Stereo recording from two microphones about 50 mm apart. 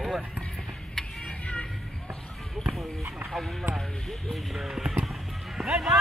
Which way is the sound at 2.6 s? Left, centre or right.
Centre.